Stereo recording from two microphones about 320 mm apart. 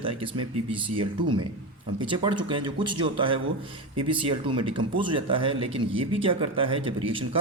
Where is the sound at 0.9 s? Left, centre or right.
Centre.